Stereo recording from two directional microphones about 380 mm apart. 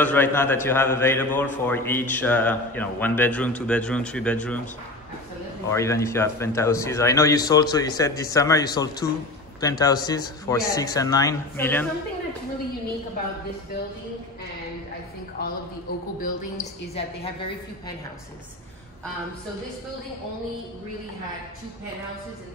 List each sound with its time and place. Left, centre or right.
0.0 s a man's voice: centre
5.7 s a man's voice: centre
16.2 s a woman's voice: centre